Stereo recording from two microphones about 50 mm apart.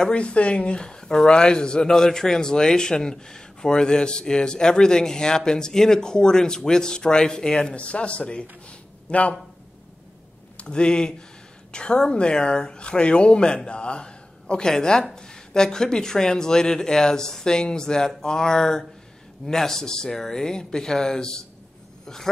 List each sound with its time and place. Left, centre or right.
0.0 s speech: left
10.6 s speech: centre
22.0 s a sound: centre